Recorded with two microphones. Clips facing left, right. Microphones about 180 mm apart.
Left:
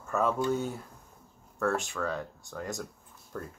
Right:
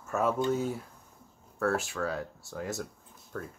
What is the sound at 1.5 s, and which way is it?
Speech, 5° right (ahead or behind).